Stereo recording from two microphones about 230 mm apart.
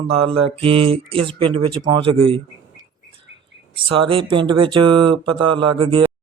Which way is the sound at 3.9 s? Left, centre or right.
Right.